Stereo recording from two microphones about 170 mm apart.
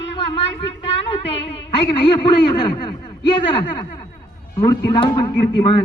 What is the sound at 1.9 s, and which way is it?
A man's voice, 25° left (ahead or behind).